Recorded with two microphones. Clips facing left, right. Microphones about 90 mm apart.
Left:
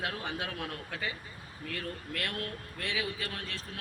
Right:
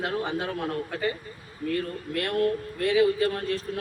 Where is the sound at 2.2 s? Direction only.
40° right (ahead or behind).